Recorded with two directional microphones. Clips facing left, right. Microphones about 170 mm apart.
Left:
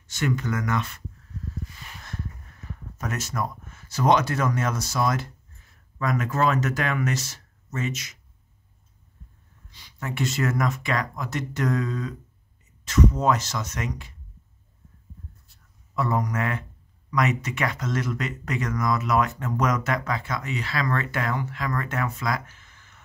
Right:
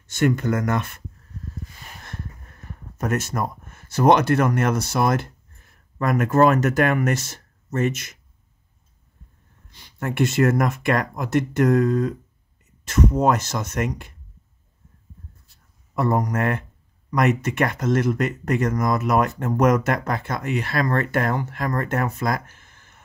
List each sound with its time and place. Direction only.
0.0 s speech: 50° right (ahead or behind)
2.0 s speech: 50° right (ahead or behind)
9.7 s speech: 55° right (ahead or behind)
15.9 s speech: 50° right (ahead or behind)